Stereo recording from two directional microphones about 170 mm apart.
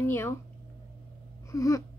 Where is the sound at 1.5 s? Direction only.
20° left (ahead or behind).